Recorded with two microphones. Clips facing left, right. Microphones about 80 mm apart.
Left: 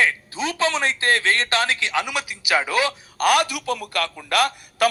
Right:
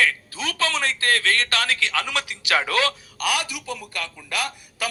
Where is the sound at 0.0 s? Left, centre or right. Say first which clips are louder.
Left 2 dB; left.